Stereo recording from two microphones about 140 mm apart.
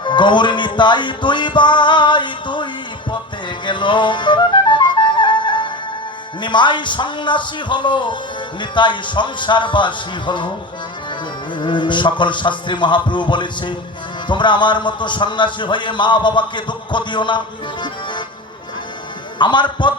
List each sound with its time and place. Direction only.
0.0 s music: 35° left (ahead or behind)
3.7 s music: 35° left (ahead or behind)
6.4 s a man's voice: 35° left (ahead or behind)
11.6 s a man's voice: 35° left (ahead or behind)
19.4 s a man's voice: 35° left (ahead or behind)